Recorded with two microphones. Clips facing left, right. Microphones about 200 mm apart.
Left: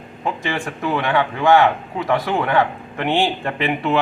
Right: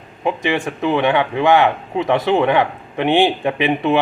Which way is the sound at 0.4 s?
20° right (ahead or behind).